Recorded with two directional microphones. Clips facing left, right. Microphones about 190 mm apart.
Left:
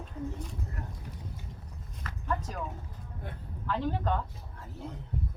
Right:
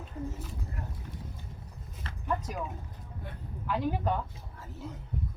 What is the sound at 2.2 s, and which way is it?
Speech, 10° right (ahead or behind).